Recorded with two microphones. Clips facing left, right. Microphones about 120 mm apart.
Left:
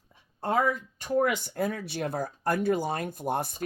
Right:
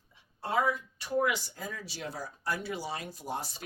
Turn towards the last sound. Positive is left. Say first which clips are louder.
# left 7 dB
turn(degrees=55)  # may be behind; listen again after turning